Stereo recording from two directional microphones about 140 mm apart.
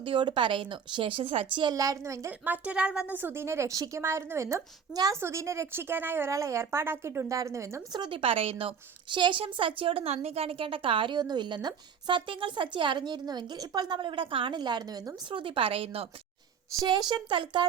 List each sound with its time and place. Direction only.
0.0 s a woman's voice: 35° right (ahead or behind)
1.6 s a woman's voice: 25° right (ahead or behind)
7.9 s a woman's voice: 35° right (ahead or behind)
16.8 s a woman's voice: 30° right (ahead or behind)